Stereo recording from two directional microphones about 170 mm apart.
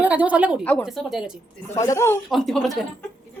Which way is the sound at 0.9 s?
Centre (ahead or behind).